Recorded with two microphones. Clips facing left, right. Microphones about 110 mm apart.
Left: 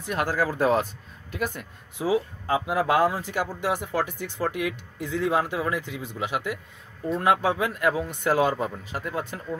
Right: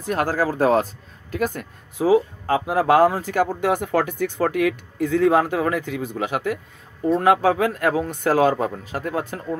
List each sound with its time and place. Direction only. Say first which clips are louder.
0.0 s speech: right 4 dB; 40° right (ahead or behind)